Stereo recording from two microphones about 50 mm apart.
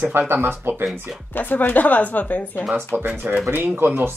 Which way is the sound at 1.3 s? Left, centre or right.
Left.